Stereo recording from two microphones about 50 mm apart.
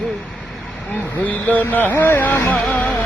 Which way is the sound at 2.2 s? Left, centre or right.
Left.